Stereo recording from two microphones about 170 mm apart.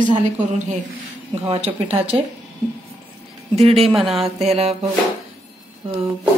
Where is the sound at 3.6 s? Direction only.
35° right (ahead or behind).